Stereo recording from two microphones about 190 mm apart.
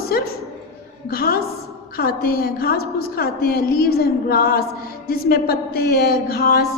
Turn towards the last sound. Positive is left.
turn(degrees=55)  # may be behind; listen again after turning